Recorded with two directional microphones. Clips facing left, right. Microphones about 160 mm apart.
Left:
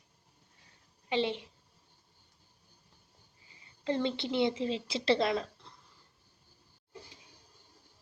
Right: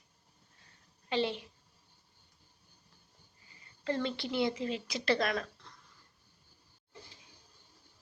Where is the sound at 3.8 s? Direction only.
20° left (ahead or behind).